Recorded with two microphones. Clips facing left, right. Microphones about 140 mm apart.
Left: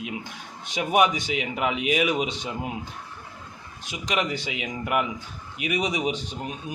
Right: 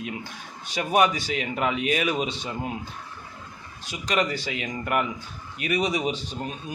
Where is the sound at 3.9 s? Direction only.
20° left (ahead or behind).